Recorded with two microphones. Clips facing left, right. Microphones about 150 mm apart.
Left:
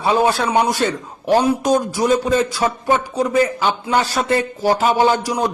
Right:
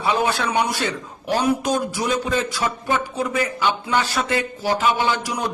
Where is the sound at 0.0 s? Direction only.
35° left (ahead or behind).